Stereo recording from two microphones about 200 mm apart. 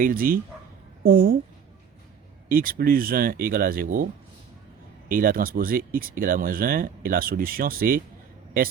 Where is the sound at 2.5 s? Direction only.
45° right (ahead or behind).